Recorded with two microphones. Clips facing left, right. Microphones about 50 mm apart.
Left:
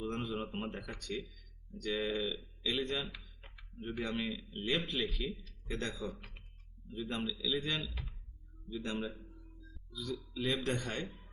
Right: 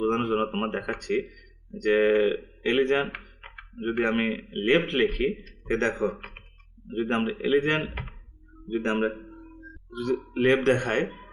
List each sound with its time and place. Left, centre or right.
0.0 s a man's voice: right